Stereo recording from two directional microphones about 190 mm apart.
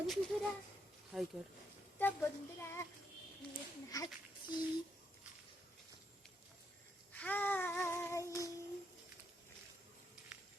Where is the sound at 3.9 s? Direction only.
20° left (ahead or behind).